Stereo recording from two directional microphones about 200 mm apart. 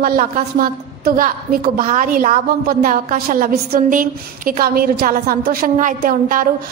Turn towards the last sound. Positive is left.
turn(degrees=-45)  # may be behind; listen again after turning